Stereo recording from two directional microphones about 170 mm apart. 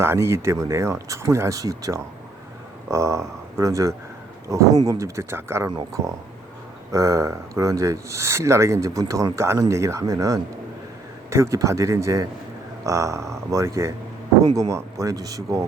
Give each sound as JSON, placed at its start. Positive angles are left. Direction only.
{"t": 0.0, "sound": "speech", "side_deg": -15}